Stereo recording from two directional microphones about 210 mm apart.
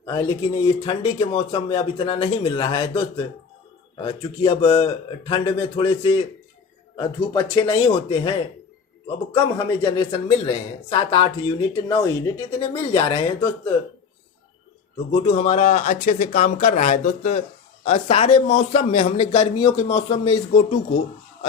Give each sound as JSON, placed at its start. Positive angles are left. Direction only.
{"t": 0.0, "sound": "speech", "side_deg": 15}
{"t": 4.4, "sound": "speech", "side_deg": 25}
{"t": 15.2, "sound": "speech", "side_deg": 25}